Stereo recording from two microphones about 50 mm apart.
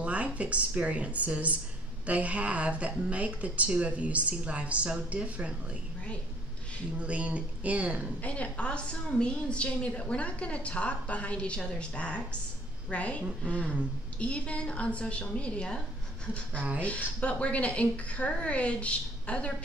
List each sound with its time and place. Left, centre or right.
0.0 s speech: right
7.0 s speech: right
8.2 s a woman's voice: left
17.2 s a woman's voice: left